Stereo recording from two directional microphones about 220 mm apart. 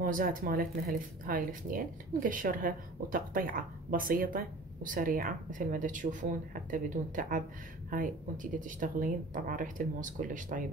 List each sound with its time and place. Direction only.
0.0 s speech: 40° right (ahead or behind)